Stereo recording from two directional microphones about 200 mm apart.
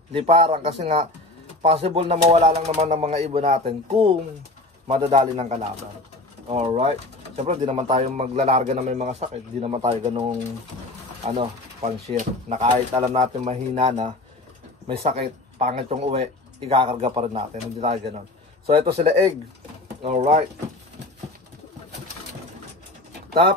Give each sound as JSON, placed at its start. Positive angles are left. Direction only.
{"t": 0.1, "sound": "speech", "side_deg": -30}
{"t": 11.2, "sound": "speech", "side_deg": -30}
{"t": 15.6, "sound": "speech", "side_deg": -30}